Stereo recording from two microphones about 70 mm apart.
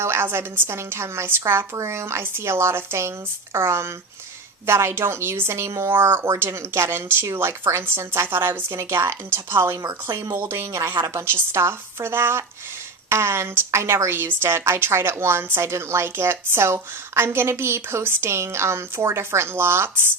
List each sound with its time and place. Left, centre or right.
0.0 s a woman's voice: right
9.7 s a woman's voice: right
10.3 s a woman's voice: right